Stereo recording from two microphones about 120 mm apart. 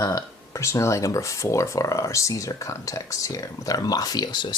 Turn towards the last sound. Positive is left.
turn(degrees=40)  # may be behind; listen again after turning